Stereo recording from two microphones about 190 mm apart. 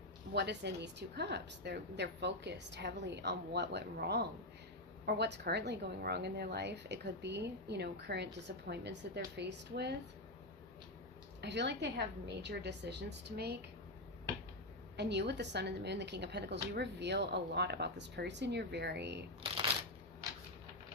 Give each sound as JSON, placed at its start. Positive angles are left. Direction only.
{"t": 0.3, "sound": "a woman's voice", "side_deg": -60}
{"t": 11.3, "sound": "a woman's voice", "side_deg": -65}
{"t": 14.9, "sound": "a woman's voice", "side_deg": -60}